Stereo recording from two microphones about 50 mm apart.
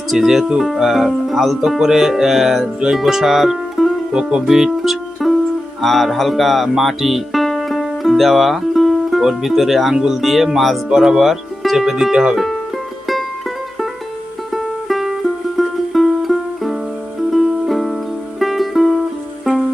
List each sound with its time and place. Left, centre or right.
0.1 s speech: centre
4.1 s speech: centre
4.4 s music: centre
5.8 s speech: centre
7.4 s music: centre
10.0 s speech: centre
14.5 s music: centre